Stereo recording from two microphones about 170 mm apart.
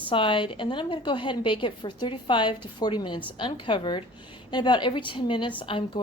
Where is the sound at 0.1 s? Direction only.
30° left (ahead or behind).